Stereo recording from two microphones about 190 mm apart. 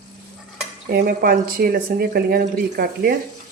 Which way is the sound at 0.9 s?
50° right (ahead or behind).